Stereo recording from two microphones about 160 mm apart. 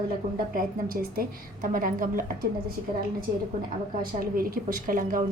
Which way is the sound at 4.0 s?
65° right (ahead or behind).